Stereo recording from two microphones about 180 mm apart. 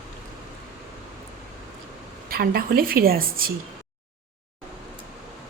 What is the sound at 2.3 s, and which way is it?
A woman's voice, 60° right (ahead or behind).